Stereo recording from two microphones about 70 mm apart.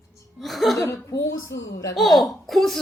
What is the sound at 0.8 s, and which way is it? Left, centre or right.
Speech, left.